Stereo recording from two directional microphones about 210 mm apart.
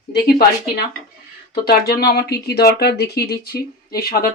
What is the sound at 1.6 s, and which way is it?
Speech, 45° left (ahead or behind).